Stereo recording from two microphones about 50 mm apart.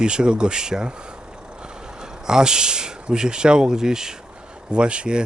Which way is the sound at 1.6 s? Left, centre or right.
Centre.